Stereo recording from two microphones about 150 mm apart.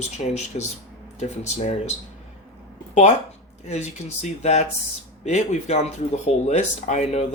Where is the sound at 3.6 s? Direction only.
50° left (ahead or behind).